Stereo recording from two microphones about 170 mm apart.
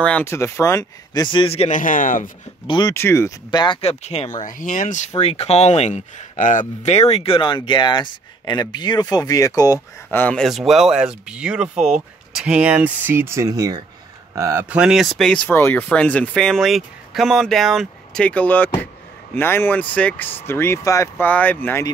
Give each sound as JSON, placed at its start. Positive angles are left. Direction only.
{"t": 0.0, "sound": "a man's voice", "side_deg": 10}
{"t": 1.8, "sound": "speech", "side_deg": 50}
{"t": 2.6, "sound": "a man's voice", "side_deg": 30}
{"t": 2.9, "sound": "speech", "side_deg": 15}
{"t": 5.2, "sound": "speech", "side_deg": 35}
{"t": 10.2, "sound": "speech", "side_deg": 5}